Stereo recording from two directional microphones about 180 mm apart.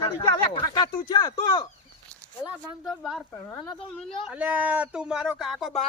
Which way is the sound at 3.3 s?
15° left (ahead or behind).